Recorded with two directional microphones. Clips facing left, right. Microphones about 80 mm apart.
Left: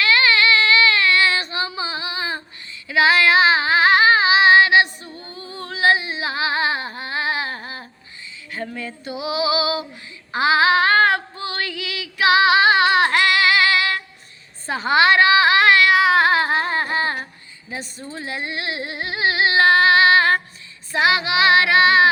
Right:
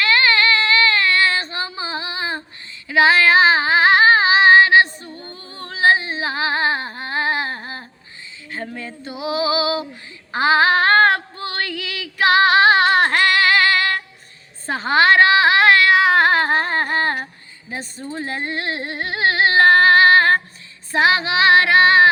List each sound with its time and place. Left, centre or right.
0.0 s child singing: right
2.8 s female singing: right
5.1 s music: right
5.4 s music: left
5.6 s a sound: right
9.2 s child singing: right
10.3 s female singing: right
14.7 s a sound: right
17.7 s speech: right
18.1 s a sound: right
20.9 s child singing: right